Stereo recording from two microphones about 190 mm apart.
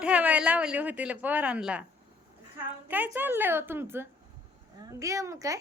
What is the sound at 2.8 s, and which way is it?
A woman's voice, 10° right (ahead or behind).